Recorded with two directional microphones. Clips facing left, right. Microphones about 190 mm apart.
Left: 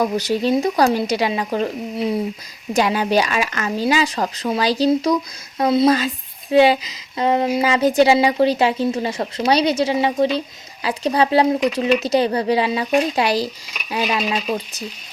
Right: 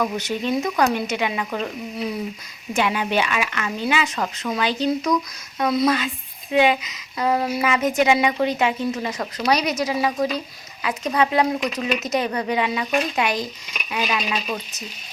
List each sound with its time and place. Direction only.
0.0 s a woman's voice: 35° left (ahead or behind)